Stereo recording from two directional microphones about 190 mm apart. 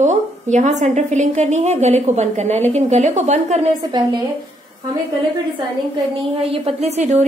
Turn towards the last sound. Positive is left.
turn(degrees=-35)  # may be behind; listen again after turning